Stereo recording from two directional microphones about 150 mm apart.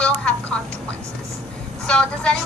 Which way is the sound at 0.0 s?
5° left (ahead or behind).